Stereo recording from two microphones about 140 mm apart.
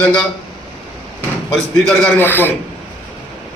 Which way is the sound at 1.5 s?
Centre (ahead or behind).